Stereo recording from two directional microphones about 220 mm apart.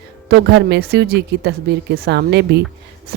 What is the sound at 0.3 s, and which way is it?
A woman's voice, 50° right (ahead or behind).